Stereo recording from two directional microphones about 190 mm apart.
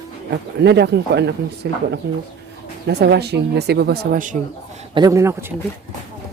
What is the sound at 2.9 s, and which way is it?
Speech, 60° right (ahead or behind).